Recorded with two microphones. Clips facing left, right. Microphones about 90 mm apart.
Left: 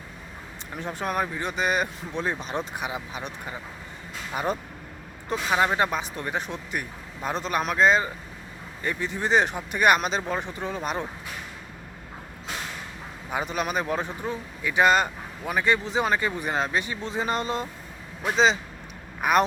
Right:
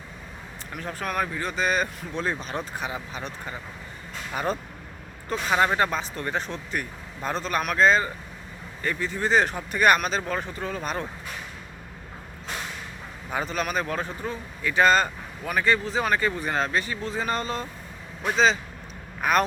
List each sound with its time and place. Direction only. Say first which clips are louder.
0.7 s a man's voice: left 2 dB; 20° left (ahead or behind)
13.3 s a man's voice: even; 15° left (ahead or behind)
19.2 s a man's voice: left 1 dB; 15° left (ahead or behind)